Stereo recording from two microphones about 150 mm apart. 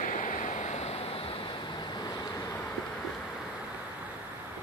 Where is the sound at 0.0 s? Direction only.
60° left (ahead or behind); by 1.5 s 40° left (ahead or behind).